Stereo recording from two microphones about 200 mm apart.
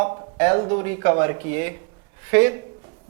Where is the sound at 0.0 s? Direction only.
30° right (ahead or behind).